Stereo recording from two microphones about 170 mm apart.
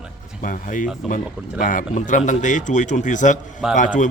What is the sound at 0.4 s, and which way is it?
A man's voice, 50° left (ahead or behind).